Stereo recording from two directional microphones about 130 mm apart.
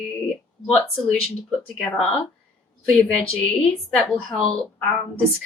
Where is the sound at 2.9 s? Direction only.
10° left (ahead or behind).